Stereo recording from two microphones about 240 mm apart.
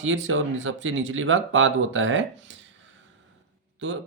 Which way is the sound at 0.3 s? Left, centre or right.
Right.